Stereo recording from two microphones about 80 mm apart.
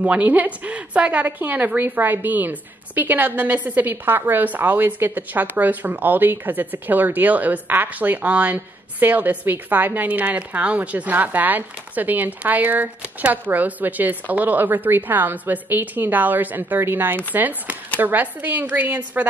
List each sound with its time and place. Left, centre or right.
0.0 s a woman's voice: centre